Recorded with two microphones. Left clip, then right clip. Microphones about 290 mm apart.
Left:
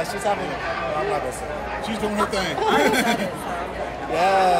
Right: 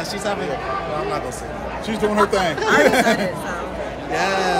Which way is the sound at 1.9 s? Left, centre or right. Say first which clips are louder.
Right 7 dB; right.